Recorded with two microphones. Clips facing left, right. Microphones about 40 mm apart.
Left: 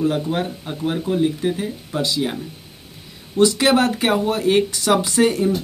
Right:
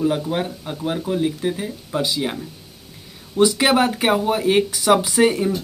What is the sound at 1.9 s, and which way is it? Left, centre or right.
Speech, centre.